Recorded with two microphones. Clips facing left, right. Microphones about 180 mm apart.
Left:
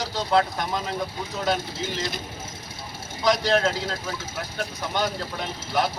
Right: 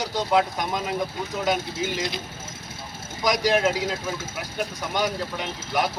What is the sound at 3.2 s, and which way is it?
Speech, 10° right (ahead or behind).